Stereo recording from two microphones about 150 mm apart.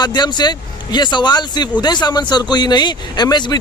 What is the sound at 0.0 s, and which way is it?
Speech, 30° left (ahead or behind).